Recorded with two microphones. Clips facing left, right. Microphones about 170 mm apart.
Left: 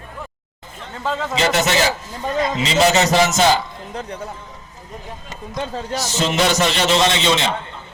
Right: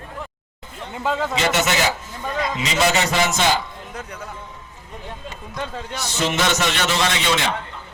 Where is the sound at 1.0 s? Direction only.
5° right (ahead or behind).